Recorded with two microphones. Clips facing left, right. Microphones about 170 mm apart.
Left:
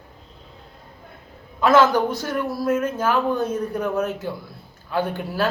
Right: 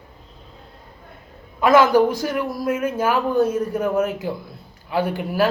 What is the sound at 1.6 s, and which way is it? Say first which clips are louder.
A man's voice: right 2 dB; 10° right (ahead or behind).